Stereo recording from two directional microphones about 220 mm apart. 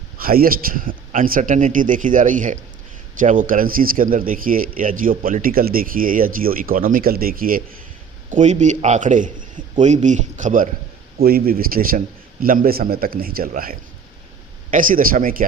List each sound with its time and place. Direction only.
0.2 s speech: 40° right (ahead or behind)